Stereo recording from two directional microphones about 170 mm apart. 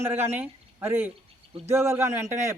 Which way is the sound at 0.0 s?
15° right (ahead or behind).